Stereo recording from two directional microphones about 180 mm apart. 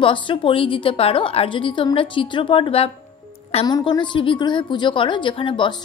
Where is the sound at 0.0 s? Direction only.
30° left (ahead or behind).